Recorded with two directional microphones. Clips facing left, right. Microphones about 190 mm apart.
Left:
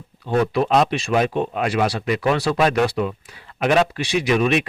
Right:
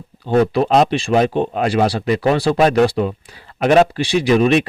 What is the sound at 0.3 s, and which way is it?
Speech, 35° right (ahead or behind).